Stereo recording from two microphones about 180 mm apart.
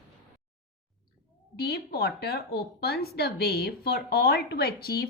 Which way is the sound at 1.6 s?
60° left (ahead or behind).